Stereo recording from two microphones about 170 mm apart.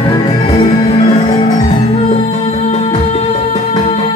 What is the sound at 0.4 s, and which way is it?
Music, 35° left (ahead or behind).